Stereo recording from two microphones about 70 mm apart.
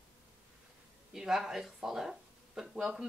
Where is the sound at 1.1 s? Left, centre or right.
Centre.